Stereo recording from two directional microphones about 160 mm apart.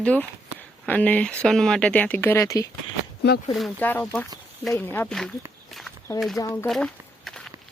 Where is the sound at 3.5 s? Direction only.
Centre (ahead or behind).